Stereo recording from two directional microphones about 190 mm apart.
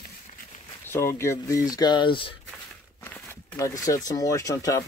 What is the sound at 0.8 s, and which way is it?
Speech, 15° left (ahead or behind).